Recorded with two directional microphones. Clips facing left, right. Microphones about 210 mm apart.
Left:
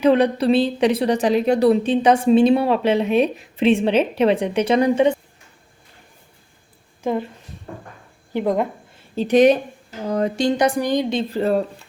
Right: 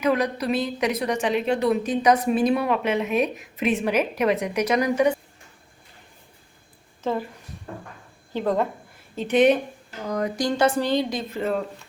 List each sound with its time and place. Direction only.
0.0 s a woman's voice: 30° left (ahead or behind)
7.0 s a woman's voice: 15° left (ahead or behind)
8.3 s speech: 15° left (ahead or behind)
9.1 s a woman's voice: 35° left (ahead or behind); by 11.0 s 15° left (ahead or behind)
11.1 s speech: 30° left (ahead or behind)